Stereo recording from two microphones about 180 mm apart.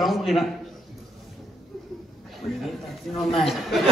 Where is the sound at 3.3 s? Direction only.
Centre (ahead or behind).